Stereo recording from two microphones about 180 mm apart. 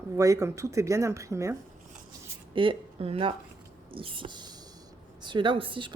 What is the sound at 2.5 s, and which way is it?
A woman's voice, 30° right (ahead or behind).